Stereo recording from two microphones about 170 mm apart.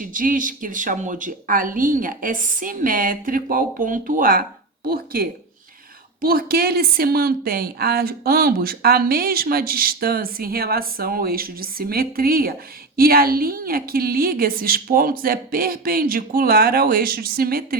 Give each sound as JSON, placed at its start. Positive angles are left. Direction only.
{"t": 0.0, "sound": "a woman's voice", "side_deg": -50}